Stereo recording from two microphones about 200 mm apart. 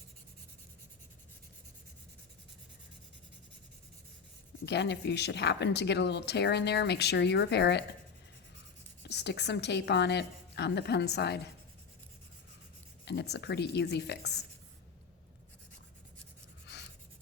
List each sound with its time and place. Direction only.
4.6 s speech: 60° left (ahead or behind)
9.0 s speech: 60° left (ahead or behind)
13.1 s speech: 55° left (ahead or behind)
16.7 s writing: 55° left (ahead or behind)